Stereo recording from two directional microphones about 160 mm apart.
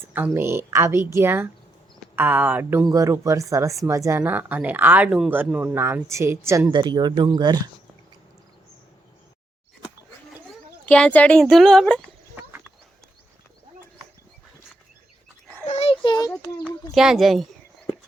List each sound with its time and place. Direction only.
0.3 s speech: 15° right (ahead or behind)
6.7 s speech: 25° right (ahead or behind)
10.8 s speech: 10° left (ahead or behind)
15.6 s a sound: 40° left (ahead or behind)
16.4 s a sound: 25° left (ahead or behind)
16.9 s speech: centre (ahead or behind)